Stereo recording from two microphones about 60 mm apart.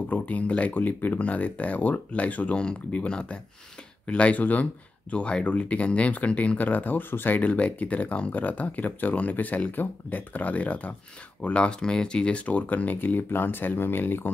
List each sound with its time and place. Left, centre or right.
0.1 s speech: left